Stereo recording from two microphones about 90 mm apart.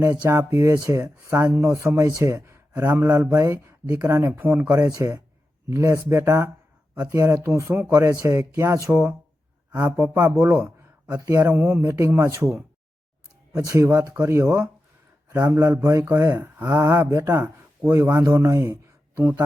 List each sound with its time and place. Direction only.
0.3 s speech: 30° right (ahead or behind)
2.7 s speech: 20° right (ahead or behind)
3.1 s speech: 35° right (ahead or behind)
4.3 s speech: 20° right (ahead or behind)
4.7 s speech: 35° right (ahead or behind)
16.4 s mantra: 20° right (ahead or behind)
16.8 s speech: 35° right (ahead or behind)
18.2 s speech: 35° right (ahead or behind)